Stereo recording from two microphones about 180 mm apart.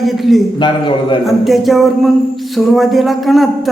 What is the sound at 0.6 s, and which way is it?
Speech, 25° left (ahead or behind).